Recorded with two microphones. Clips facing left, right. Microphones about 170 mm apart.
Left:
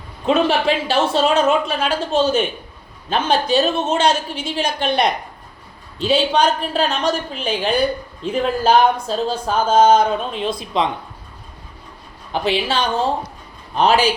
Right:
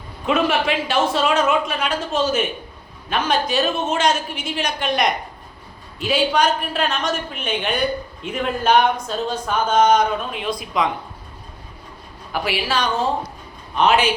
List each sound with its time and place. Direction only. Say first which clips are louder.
0.3 s a woman's voice: left 3 dB; 30° left (ahead or behind)
12.3 s a woman's voice: left 3 dB; 25° left (ahead or behind)